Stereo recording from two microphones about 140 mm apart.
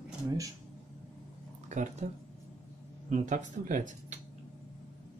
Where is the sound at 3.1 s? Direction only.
60° right (ahead or behind).